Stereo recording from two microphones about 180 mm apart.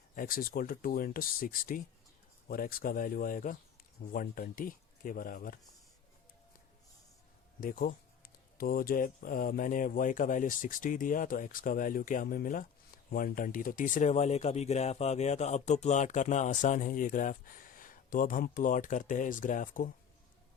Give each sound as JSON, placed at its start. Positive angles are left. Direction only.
{"t": 0.2, "sound": "speech", "side_deg": 55}
{"t": 7.6, "sound": "speech", "side_deg": 50}